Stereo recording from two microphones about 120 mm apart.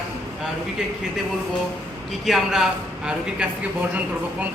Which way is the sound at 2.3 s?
Centre (ahead or behind).